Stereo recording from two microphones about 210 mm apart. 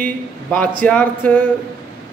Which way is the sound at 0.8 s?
5° left (ahead or behind).